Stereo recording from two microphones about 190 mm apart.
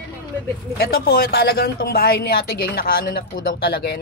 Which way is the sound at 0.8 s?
50° left (ahead or behind).